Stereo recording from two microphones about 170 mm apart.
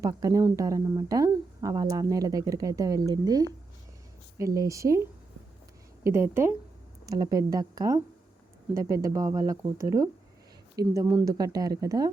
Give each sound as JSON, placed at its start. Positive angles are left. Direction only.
{"t": 0.0, "sound": "speech", "side_deg": -20}